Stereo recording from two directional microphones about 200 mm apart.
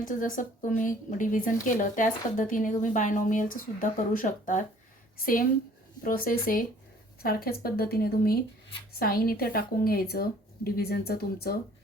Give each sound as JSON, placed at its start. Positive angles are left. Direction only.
{"t": 0.0, "sound": "a woman's voice", "side_deg": 40}